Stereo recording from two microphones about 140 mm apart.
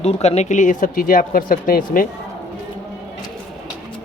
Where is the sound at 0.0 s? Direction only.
50° left (ahead or behind); by 2.0 s 85° left.